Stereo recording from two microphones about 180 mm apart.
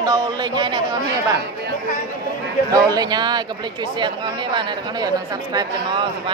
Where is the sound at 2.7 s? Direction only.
20° right (ahead or behind).